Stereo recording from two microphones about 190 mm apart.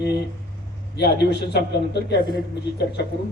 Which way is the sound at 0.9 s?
60° left (ahead or behind).